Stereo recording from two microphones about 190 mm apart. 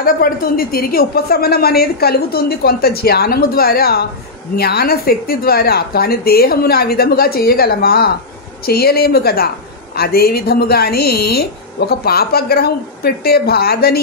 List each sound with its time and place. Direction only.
0.0 s a woman's voice: 50° left (ahead or behind)